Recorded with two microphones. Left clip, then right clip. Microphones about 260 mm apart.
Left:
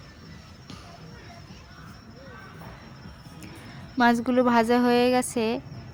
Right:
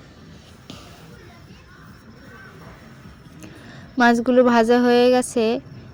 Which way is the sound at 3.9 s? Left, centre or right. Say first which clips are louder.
Right 6 dB; centre.